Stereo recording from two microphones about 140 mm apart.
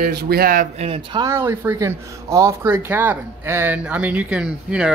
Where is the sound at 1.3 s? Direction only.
20° right (ahead or behind).